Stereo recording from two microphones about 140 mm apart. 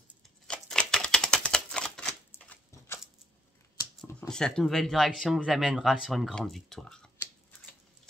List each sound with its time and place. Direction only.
0.5 s typewriter: 5° left (ahead or behind)
4.3 s speech: 5° left (ahead or behind)